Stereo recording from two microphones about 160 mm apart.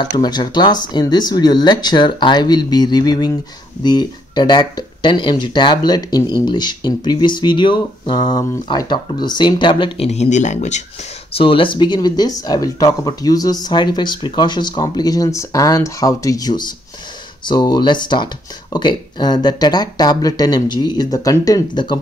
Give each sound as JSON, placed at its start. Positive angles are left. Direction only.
{"t": 0.2, "sound": "speech", "side_deg": 25}
{"t": 11.3, "sound": "speech", "side_deg": 35}